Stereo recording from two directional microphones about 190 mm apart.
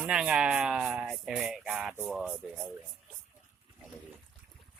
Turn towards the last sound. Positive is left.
turn(degrees=0)  # may be behind; listen again after turning